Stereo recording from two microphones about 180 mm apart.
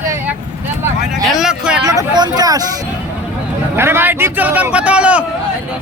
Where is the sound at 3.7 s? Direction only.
10° right (ahead or behind).